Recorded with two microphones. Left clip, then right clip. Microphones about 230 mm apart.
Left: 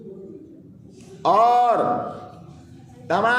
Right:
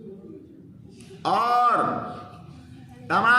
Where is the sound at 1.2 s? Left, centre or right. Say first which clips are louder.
Left 5 dB; centre.